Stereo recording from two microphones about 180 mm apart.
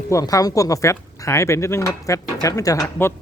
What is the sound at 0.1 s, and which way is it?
Speech, 20° left (ahead or behind).